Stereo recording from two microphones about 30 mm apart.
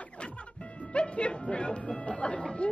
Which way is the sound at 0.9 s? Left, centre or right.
Left.